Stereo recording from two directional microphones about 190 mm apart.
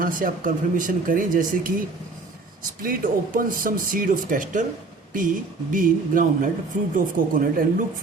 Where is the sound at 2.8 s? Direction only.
45° right (ahead or behind).